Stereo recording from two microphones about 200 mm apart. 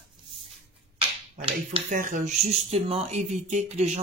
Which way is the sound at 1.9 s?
40° right (ahead or behind).